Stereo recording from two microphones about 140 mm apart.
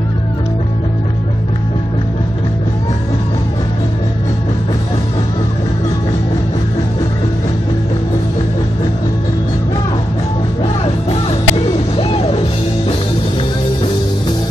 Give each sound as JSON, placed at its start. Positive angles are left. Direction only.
{"t": 10.6, "sound": "music", "side_deg": 45}